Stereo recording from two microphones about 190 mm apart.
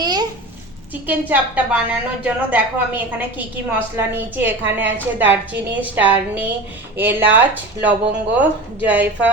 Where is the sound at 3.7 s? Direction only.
10° right (ahead or behind).